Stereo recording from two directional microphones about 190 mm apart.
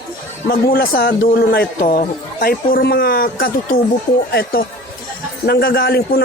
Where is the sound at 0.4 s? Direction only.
50° left (ahead or behind).